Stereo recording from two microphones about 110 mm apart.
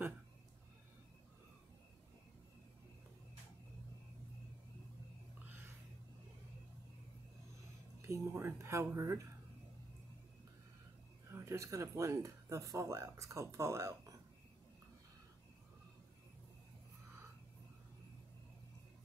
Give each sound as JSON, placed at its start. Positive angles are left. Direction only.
{"t": 8.0, "sound": "speech", "side_deg": -25}
{"t": 11.2, "sound": "speech", "side_deg": -25}